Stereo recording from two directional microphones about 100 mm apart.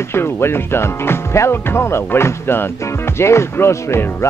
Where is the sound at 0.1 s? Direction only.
25° left (ahead or behind).